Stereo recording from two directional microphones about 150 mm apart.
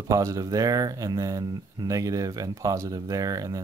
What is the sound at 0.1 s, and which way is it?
Speech, 20° right (ahead or behind).